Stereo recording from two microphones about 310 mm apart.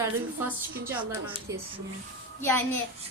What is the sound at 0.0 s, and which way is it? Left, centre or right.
A woman's voice, centre.